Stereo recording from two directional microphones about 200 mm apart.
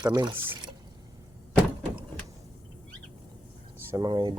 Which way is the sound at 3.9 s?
20° right (ahead or behind).